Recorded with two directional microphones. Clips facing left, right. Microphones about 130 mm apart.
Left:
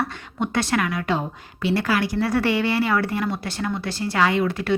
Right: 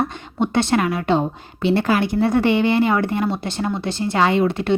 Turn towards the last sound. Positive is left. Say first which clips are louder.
# right 3 dB
turn(degrees=-25)  # may be behind; listen again after turning